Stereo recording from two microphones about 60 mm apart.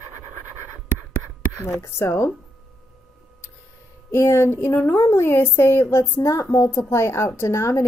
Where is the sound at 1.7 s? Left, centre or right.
Left.